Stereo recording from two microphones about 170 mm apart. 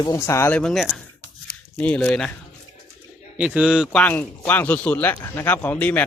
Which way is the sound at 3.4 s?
5° right (ahead or behind).